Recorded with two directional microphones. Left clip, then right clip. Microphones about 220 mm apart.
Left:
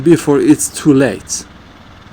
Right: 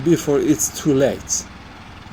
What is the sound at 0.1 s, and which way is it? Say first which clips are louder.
Speech: left 7 dB; 55° left (ahead or behind).